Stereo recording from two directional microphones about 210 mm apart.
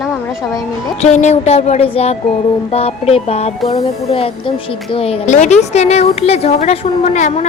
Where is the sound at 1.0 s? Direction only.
35° left (ahead or behind).